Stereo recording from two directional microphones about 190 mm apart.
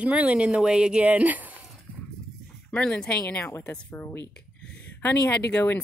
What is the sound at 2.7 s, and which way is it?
Speech, 5° left (ahead or behind).